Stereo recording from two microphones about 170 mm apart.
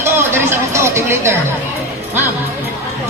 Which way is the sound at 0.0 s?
15° right (ahead or behind).